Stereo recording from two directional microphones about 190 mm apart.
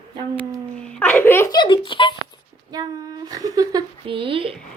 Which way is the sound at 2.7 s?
20° right (ahead or behind).